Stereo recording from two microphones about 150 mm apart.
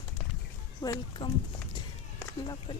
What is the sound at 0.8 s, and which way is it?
Speech, 30° left (ahead or behind).